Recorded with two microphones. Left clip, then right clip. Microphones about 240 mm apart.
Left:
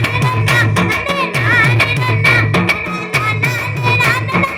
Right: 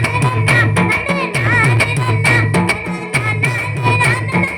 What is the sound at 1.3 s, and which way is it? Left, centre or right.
Music, left.